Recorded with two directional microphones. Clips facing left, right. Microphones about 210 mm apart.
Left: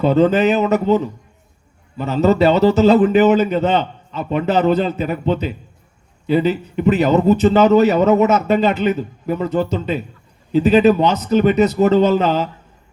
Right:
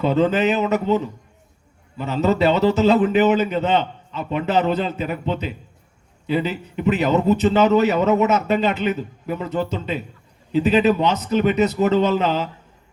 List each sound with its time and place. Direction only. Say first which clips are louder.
0.0 s a man's voice: left 4 dB; 40° left (ahead or behind)